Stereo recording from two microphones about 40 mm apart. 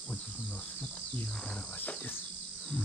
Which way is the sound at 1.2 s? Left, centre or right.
Left.